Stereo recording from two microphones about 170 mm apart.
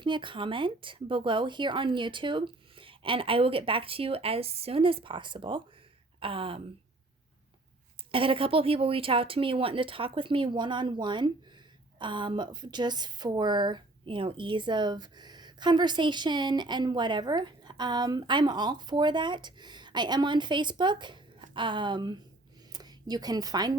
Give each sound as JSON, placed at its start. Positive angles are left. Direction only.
{"t": 0.0, "sound": "a woman's voice", "side_deg": -30}
{"t": 8.1, "sound": "a woman's voice", "side_deg": -30}